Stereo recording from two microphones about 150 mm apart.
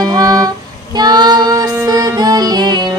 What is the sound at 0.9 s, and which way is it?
Child singing, 25° right (ahead or behind).